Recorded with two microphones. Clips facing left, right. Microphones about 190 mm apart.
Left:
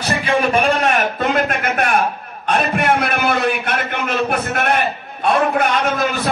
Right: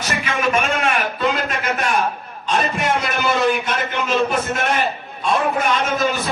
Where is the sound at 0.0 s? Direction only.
30° left (ahead or behind); by 5.3 s 60° left (ahead or behind).